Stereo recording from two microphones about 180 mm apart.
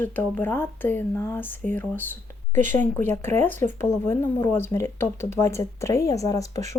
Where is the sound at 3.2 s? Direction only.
15° left (ahead or behind).